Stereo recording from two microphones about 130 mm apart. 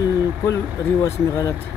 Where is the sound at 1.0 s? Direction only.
25° left (ahead or behind).